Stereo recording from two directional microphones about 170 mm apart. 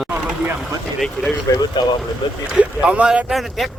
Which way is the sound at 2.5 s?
5° right (ahead or behind).